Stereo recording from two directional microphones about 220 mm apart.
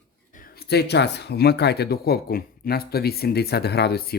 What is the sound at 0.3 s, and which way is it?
Speech, 45° left (ahead or behind).